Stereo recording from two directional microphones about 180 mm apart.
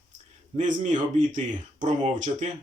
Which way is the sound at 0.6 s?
45° right (ahead or behind).